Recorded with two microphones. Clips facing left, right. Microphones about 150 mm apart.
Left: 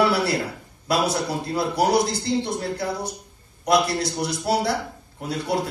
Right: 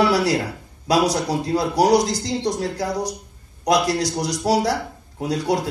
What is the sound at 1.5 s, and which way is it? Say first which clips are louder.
Speech: right 3 dB; 35° right (ahead or behind).